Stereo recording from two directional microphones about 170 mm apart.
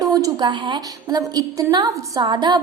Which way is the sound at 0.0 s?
20° right (ahead or behind).